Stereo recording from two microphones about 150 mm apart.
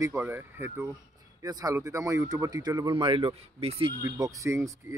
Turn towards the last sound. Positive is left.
turn(degrees=-20)  # may be behind; listen again after turning